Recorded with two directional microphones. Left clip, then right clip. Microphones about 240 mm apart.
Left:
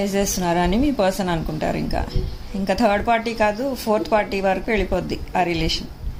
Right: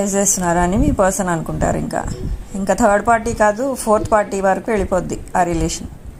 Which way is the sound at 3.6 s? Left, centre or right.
Centre.